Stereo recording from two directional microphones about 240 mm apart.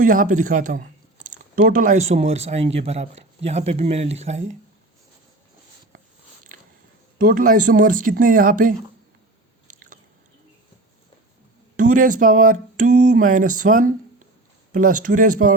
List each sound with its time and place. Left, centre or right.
0.0 s speech: right
7.2 s speech: right
11.8 s speech: right